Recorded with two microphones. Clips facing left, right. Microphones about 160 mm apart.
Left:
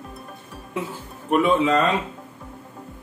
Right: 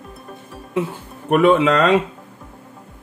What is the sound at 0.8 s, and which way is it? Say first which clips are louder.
Speech: right 7 dB; 70° right (ahead or behind).